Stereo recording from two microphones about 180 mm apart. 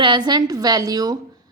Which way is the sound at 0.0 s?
25° right (ahead or behind).